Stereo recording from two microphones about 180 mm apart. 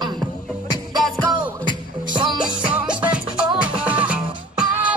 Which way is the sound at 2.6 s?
5° right (ahead or behind).